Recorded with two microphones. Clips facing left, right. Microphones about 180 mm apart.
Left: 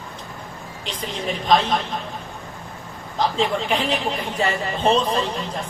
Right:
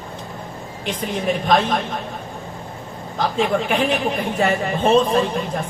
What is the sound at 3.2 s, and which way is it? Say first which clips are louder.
Speech: right 2 dB; 55° right (ahead or behind).